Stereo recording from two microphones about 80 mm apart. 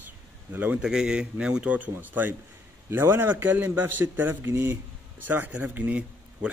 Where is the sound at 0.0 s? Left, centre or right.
Right.